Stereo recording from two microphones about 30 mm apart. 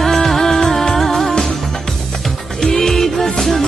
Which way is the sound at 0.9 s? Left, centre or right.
Centre.